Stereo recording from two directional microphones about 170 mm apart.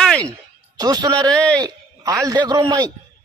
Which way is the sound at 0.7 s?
20° right (ahead or behind).